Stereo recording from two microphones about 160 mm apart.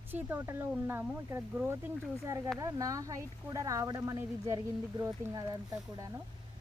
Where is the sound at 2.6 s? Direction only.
20° right (ahead or behind).